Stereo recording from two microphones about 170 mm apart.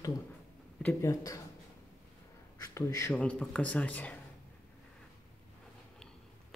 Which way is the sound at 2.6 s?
20° left (ahead or behind).